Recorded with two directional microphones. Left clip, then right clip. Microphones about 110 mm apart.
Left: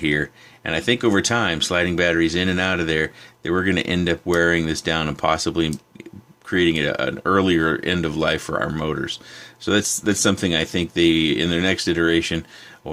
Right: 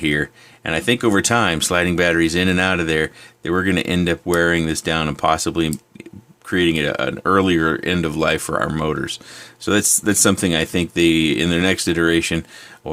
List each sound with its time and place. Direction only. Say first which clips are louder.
0.0 s speech: right 2 dB; 25° right (ahead or behind)